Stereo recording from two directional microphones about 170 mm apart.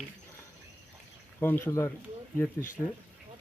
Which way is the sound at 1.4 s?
10° left (ahead or behind).